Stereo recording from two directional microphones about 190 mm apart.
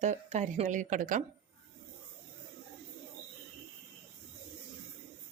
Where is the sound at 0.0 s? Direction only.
40° right (ahead or behind).